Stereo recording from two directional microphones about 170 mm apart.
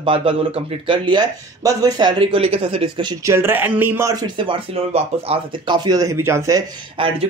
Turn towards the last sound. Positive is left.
turn(degrees=-30)  # may be behind; listen again after turning